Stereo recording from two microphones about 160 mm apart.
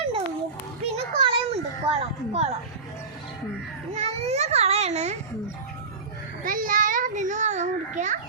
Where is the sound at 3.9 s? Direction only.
40° right (ahead or behind).